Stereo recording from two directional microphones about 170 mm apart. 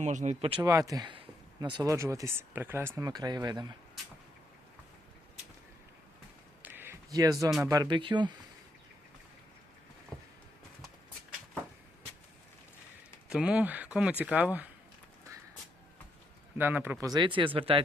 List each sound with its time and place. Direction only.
0.0 s speech: 45° right (ahead or behind)
0.6 s speech: 20° right (ahead or behind)
6.6 s a sound: 10° right (ahead or behind)
7.6 s speech: 20° right (ahead or behind)
13.2 s speech: 5° right (ahead or behind)
16.6 s speech: 10° right (ahead or behind); by 17.8 s 30° right (ahead or behind)